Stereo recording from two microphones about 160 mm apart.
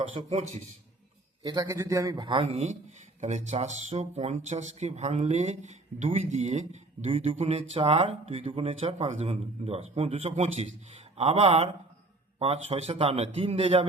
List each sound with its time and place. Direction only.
0.2 s a man's voice: 35° right (ahead or behind)
1.5 s a man's voice: 20° right (ahead or behind)
2.4 s a man's voice: 45° right (ahead or behind)